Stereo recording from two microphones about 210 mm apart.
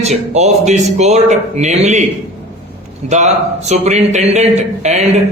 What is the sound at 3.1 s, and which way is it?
A man's voice, 35° right (ahead or behind).